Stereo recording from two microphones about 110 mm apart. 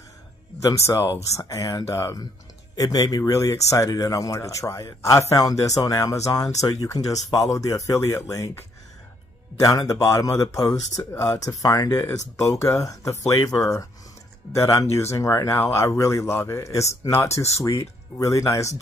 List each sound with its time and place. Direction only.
0.6 s speech: 30° left (ahead or behind)
9.6 s speech: 30° left (ahead or behind)